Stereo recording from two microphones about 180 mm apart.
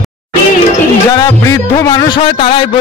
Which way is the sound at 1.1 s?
20° left (ahead or behind).